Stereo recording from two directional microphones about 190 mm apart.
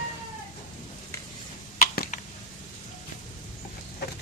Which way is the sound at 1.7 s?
50° left (ahead or behind).